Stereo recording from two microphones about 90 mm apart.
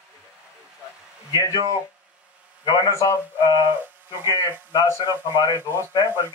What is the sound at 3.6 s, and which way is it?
Speech, 20° right (ahead or behind).